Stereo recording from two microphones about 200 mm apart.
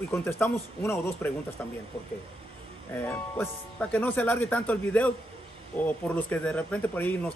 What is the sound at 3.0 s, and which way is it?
Speech, 10° left (ahead or behind).